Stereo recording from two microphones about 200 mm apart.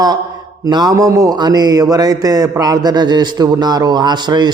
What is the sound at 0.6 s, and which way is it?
A man's voice, 20° right (ahead or behind).